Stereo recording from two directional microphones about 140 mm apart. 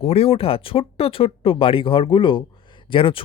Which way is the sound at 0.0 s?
45° left (ahead or behind).